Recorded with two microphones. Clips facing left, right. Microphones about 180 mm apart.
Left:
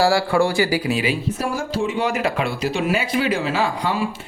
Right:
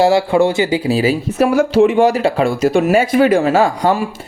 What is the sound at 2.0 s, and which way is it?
Speech, 35° right (ahead or behind).